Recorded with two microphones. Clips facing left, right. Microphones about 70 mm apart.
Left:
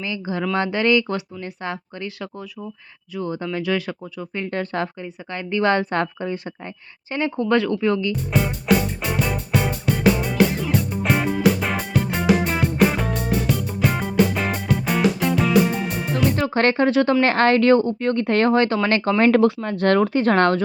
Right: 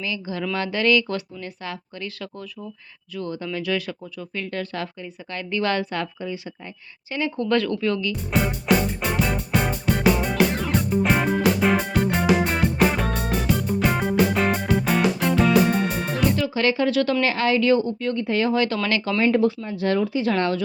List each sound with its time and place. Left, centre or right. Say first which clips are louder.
0.0 s speech: left 3 dB; left
7.1 s speech: left 2 dB; left
7.3 s speech: left 3 dB; centre
8.3 s music: left 1 dB; centre
16.3 s speech: left 2 dB; left
17.2 s speech: left 5 dB; left
18.2 s speech: left 4 dB; left
19.2 s speech: left 4 dB; left